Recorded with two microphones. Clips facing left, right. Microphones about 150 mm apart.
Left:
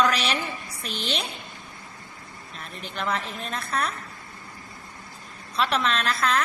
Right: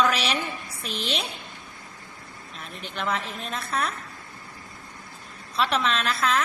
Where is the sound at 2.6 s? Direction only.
Centre (ahead or behind).